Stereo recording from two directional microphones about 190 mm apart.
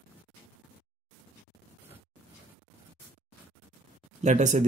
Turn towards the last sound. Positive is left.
turn(degrees=-40)  # may be behind; listen again after turning